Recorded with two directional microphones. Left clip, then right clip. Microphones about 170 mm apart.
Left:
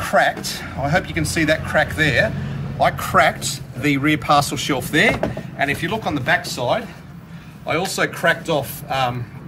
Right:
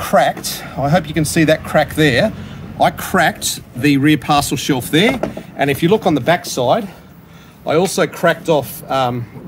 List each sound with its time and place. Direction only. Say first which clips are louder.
0.0 s a man's voice: right 3 dB; 40° right (ahead or behind)